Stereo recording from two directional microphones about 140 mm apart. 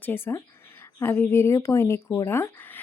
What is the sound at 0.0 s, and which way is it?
Speech, 15° left (ahead or behind).